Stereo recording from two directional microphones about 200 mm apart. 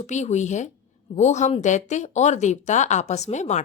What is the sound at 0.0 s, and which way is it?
A woman's voice, 35° left (ahead or behind).